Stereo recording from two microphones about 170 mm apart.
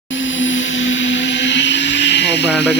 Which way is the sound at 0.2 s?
90° left.